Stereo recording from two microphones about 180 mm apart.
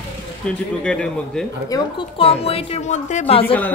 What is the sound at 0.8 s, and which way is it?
Speech, 5° left (ahead or behind).